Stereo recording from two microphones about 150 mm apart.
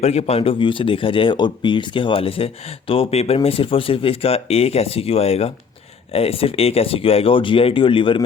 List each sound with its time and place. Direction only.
0.0 s speech: 45° left (ahead or behind)